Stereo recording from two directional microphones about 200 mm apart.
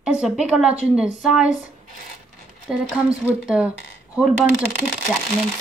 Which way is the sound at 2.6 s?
Centre (ahead or behind).